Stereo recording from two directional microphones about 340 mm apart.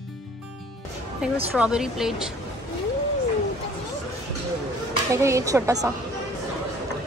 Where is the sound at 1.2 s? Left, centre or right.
Centre.